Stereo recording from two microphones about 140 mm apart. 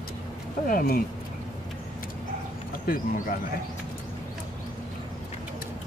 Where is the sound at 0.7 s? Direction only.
90° left.